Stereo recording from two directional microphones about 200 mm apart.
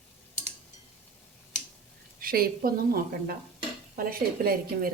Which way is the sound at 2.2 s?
45° right (ahead or behind).